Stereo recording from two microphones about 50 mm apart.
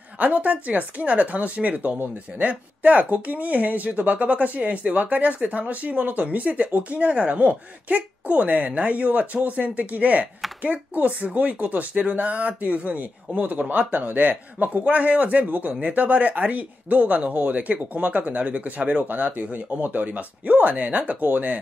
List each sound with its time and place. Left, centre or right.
0.2 s speech: right